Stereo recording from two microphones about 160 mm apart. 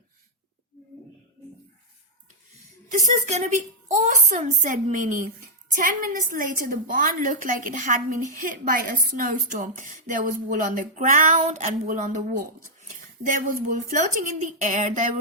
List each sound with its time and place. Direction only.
3.0 s a woman's voice: 45° right (ahead or behind)